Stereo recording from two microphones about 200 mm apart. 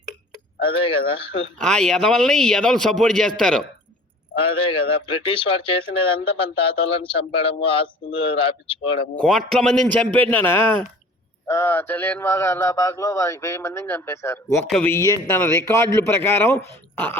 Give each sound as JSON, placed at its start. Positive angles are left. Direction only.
{"t": 0.7, "sound": "speech", "side_deg": 25}
{"t": 1.5, "sound": "a man's voice", "side_deg": 5}
{"t": 4.4, "sound": "speech", "side_deg": 25}
{"t": 9.1, "sound": "speech", "side_deg": 5}